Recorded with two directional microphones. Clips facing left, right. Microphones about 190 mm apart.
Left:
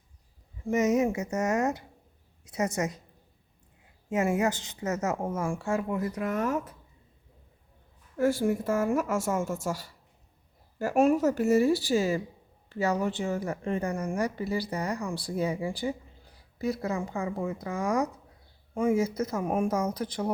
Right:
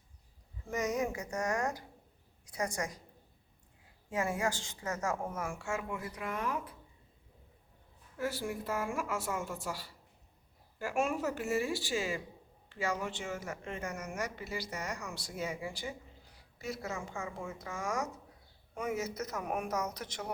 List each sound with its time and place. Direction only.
0.6 s a woman's voice: 25° left (ahead or behind)
4.1 s speech: 20° left (ahead or behind)
5.1 s speech: 30° left (ahead or behind)
8.2 s a woman's voice: 50° left (ahead or behind); by 20.3 s 30° left (ahead or behind)